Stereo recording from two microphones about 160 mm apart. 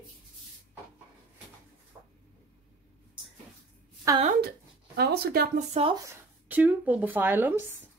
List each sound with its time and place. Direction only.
4.1 s a woman's voice: 20° right (ahead or behind)
4.9 s speech: 80° right
5.7 s speech: 35° right (ahead or behind)
6.0 s speech: 10° right (ahead or behind)